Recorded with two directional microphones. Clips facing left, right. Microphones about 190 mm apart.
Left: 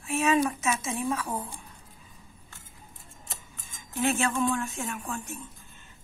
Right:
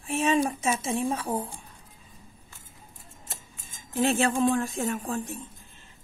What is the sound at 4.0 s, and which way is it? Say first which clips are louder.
A woman's voice: right 3 dB; 35° right (ahead or behind).